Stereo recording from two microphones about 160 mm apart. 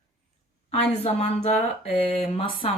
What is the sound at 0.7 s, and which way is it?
Speech, 40° left (ahead or behind).